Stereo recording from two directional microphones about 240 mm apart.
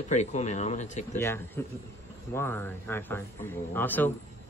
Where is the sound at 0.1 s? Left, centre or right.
Left.